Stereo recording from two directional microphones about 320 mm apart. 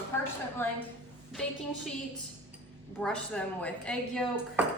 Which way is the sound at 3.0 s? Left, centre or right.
Centre.